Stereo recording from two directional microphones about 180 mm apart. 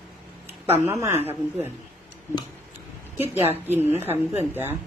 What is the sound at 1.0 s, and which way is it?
Speech, 10° right (ahead or behind).